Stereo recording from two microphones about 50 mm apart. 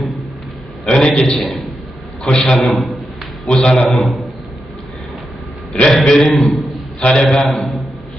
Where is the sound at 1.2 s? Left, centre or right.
Centre.